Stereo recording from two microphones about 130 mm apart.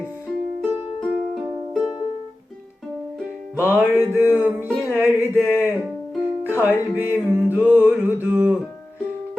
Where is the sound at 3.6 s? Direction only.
10° right (ahead or behind).